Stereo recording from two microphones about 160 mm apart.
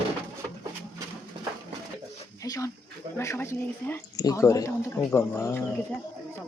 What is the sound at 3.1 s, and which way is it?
Speech, 15° left (ahead or behind).